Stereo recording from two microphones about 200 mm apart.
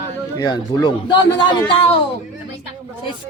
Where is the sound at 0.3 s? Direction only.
20° left (ahead or behind).